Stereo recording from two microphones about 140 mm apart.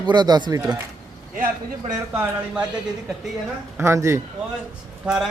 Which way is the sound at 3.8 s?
20° right (ahead or behind).